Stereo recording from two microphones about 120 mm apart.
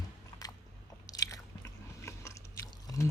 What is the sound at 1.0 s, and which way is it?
Biting, 30° left (ahead or behind).